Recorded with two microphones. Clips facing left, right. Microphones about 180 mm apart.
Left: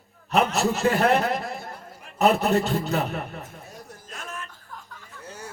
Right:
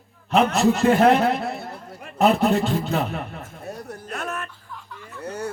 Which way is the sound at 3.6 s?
65° right (ahead or behind).